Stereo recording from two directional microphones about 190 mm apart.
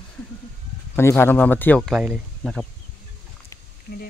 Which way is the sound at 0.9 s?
10° left (ahead or behind).